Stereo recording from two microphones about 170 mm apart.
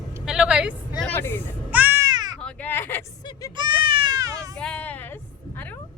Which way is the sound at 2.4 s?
10° left (ahead or behind).